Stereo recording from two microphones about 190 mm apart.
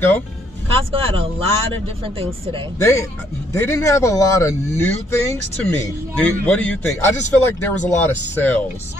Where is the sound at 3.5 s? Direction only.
15° left (ahead or behind).